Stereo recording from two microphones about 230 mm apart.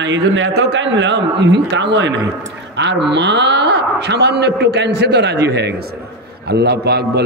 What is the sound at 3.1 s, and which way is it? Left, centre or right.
A man's voice, right.